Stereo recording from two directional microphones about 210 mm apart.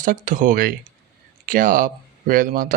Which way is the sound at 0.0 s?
40° right (ahead or behind).